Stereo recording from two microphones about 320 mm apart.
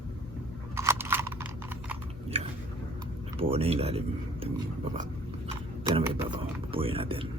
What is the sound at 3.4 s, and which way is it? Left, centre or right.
Speech, centre.